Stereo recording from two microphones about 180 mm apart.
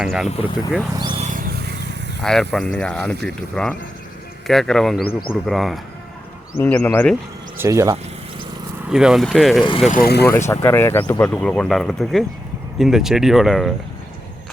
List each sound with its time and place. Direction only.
0.0 s speech: centre (ahead or behind)
0.3 s speech: 35° left (ahead or behind)
0.9 s speech: 25° right (ahead or behind)
1.2 s vehicle: 45° right (ahead or behind); by 1.9 s 65° right (ahead or behind)
2.2 s speech: 5° left (ahead or behind)
7.6 s speech: 15° right (ahead or behind)
8.9 s speech: 5° right (ahead or behind)
9.9 s speech: 60° left (ahead or behind)
10.2 s speech: 15° left (ahead or behind)